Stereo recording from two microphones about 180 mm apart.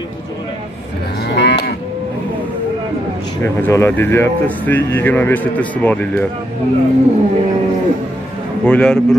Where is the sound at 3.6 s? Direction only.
15° left (ahead or behind).